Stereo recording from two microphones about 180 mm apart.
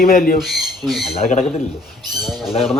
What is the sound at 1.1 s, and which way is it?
Speech, 35° left (ahead or behind).